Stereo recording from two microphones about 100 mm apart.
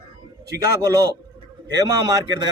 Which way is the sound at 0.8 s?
35° right (ahead or behind).